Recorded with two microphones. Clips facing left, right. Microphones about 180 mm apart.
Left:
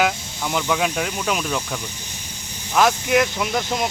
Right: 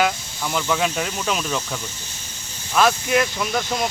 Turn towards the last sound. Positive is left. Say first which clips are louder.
# left 1 dB
turn(degrees=15)  # may be behind; listen again after turning